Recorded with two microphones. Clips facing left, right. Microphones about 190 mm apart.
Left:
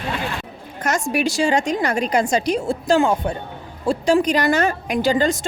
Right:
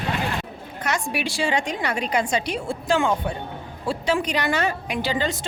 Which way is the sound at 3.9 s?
45° left (ahead or behind).